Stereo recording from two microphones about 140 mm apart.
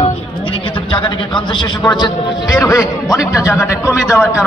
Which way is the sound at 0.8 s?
35° left (ahead or behind).